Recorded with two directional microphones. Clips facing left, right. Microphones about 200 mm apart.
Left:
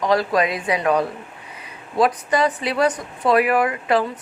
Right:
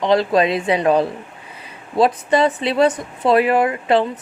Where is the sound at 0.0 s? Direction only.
25° right (ahead or behind).